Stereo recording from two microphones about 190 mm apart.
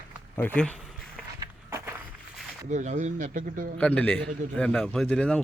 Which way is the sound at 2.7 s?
40° right (ahead or behind).